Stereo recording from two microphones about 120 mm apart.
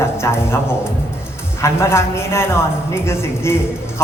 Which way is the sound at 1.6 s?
25° left (ahead or behind).